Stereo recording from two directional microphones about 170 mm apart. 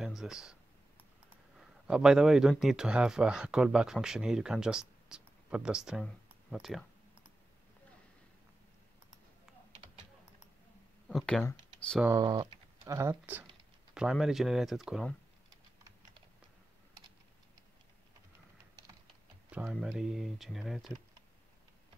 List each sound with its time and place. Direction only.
0.0 s a sound: centre (ahead or behind)
1.6 s a man's voice: 5° right (ahead or behind)
11.1 s speech: 5° left (ahead or behind)
12.0 s speech: 20° right (ahead or behind)
13.9 s speech: 5° right (ahead or behind)
19.5 s speech: 5° right (ahead or behind)